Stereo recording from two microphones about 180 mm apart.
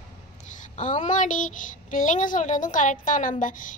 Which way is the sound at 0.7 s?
40° left (ahead or behind).